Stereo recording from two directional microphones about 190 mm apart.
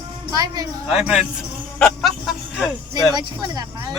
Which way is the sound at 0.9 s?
Centre (ahead or behind).